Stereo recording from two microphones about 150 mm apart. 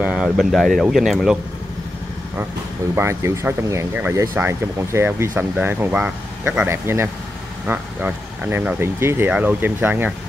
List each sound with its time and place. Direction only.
0.0 s speech: 5° right (ahead or behind)
3.0 s speech: 20° right (ahead or behind)